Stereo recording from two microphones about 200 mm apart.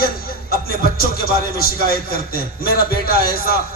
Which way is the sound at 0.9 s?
50° left (ahead or behind).